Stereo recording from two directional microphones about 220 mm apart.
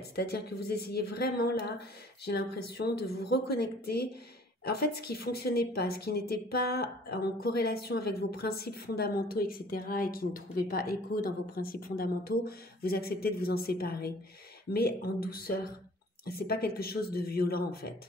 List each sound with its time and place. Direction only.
0.1 s a woman's voice: 45° left (ahead or behind)